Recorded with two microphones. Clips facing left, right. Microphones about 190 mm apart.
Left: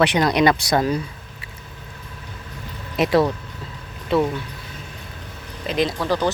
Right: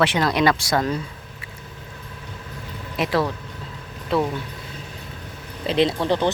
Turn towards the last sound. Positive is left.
turn(degrees=-25)  # may be behind; listen again after turning